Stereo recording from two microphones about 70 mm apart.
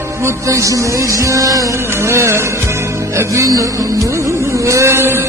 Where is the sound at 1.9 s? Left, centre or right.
Right.